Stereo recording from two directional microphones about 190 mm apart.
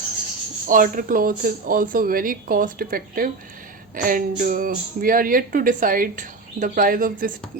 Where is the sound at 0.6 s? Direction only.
45° right (ahead or behind).